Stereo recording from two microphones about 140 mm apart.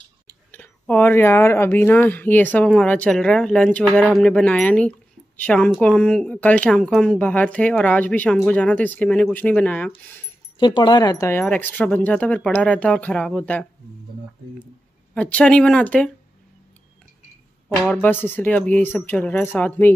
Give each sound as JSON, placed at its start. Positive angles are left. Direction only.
{"t": 0.5, "sound": "speech", "side_deg": 10}
{"t": 10.6, "sound": "speech", "side_deg": 35}
{"t": 11.4, "sound": "speech", "side_deg": 10}
{"t": 15.1, "sound": "speech", "side_deg": 10}
{"t": 17.7, "sound": "speech", "side_deg": 10}